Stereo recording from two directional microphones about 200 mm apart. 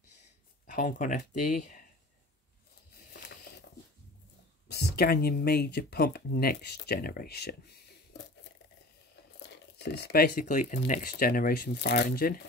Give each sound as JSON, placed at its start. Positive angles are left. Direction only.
{"t": 0.7, "sound": "speech", "side_deg": 40}
{"t": 3.1, "sound": "a sound", "side_deg": 50}
{"t": 4.6, "sound": "speech", "side_deg": 55}
{"t": 9.8, "sound": "speech", "side_deg": 55}